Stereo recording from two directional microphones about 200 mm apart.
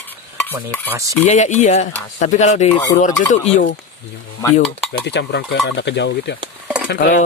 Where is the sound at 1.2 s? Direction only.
35° left (ahead or behind).